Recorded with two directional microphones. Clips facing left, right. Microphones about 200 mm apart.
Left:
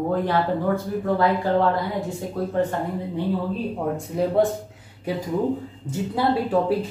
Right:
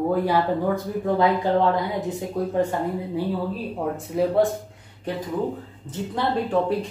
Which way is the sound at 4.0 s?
Centre (ahead or behind).